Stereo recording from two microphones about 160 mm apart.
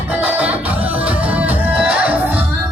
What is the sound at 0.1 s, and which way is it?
Music, 10° right (ahead or behind).